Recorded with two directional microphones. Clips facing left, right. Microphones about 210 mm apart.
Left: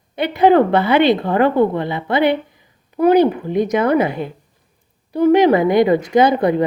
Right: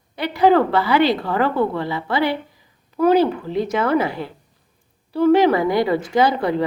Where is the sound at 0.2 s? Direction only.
20° left (ahead or behind).